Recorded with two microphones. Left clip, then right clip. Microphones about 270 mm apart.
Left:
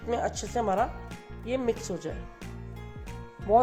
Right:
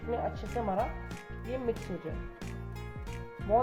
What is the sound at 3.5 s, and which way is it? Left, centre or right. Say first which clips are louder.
Speech: left 5 dB; left.